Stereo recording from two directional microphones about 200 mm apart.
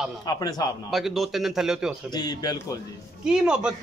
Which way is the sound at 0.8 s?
Centre (ahead or behind).